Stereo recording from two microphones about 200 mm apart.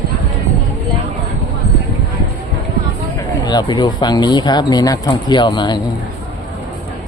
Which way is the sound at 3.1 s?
20° left (ahead or behind).